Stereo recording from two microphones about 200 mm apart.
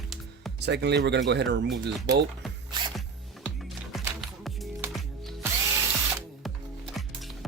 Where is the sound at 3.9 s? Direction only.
Centre (ahead or behind).